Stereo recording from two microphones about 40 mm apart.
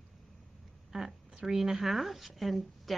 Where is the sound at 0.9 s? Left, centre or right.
Centre.